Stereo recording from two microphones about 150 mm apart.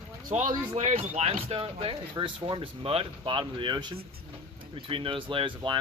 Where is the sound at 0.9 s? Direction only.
45° right (ahead or behind).